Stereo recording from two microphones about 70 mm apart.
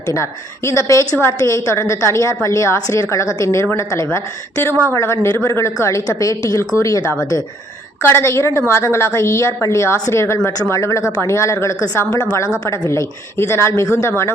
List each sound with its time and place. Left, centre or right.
0.1 s a woman's voice: left
4.6 s a woman's voice: left
8.0 s a woman's voice: left